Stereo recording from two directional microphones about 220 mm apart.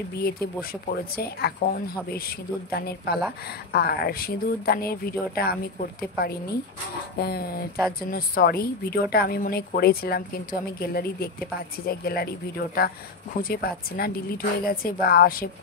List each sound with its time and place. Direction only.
0.2 s speech: 45° left (ahead or behind)